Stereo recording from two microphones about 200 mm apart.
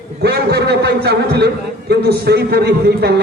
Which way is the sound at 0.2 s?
50° right (ahead or behind).